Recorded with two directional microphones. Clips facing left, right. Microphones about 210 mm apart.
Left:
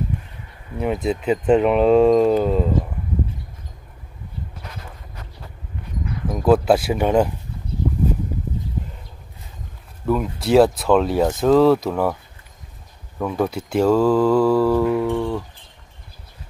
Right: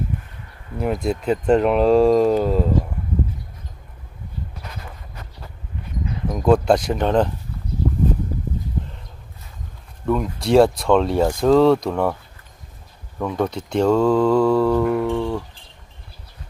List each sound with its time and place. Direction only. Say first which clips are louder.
0.7 s speech: even; 5° left (ahead or behind)
6.2 s speech: even; 5° left (ahead or behind)
10.0 s speech: even; 5° left (ahead or behind)
13.2 s speech: left 1 dB; 5° left (ahead or behind)